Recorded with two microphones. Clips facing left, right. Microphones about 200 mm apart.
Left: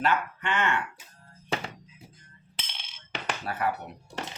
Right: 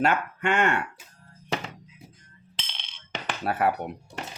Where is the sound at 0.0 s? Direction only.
50° right (ahead or behind).